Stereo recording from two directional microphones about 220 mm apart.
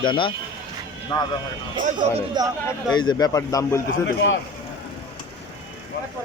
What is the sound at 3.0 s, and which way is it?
Speech, 20° left (ahead or behind).